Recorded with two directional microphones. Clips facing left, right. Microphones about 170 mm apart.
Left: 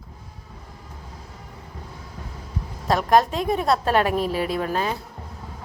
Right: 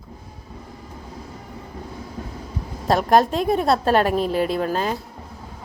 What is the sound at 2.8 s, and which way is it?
A woman's voice, 30° right (ahead or behind).